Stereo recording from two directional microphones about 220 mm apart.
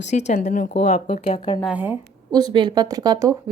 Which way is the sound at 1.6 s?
5° right (ahead or behind).